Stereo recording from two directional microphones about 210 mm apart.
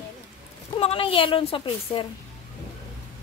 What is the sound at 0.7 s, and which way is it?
A woman's voice, 25° left (ahead or behind).